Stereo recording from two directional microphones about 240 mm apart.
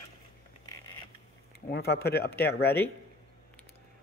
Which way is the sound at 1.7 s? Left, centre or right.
Left.